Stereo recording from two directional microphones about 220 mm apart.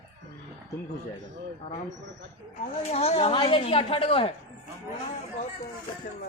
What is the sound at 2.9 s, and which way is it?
A woman's voice, 25° left (ahead or behind).